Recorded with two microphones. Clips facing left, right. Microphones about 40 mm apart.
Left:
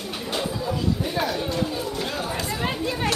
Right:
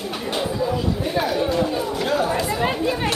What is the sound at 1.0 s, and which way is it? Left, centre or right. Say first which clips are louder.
Chatter: right 3 dB; centre.